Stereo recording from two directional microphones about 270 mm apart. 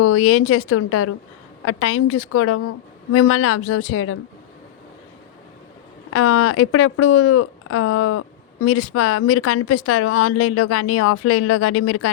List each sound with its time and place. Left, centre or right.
0.0 s speech: left
6.1 s speech: left